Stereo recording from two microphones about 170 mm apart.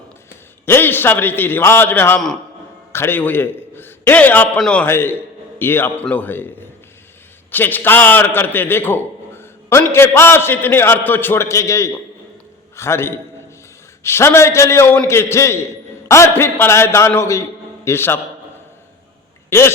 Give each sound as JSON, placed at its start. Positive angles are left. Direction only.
{"t": 0.6, "sound": "a man's voice", "side_deg": 15}
{"t": 19.5, "sound": "speech", "side_deg": 15}